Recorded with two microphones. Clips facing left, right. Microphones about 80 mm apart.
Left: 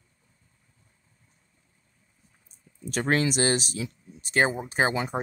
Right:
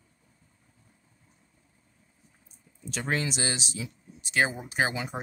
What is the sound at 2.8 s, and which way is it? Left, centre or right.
Speech, left.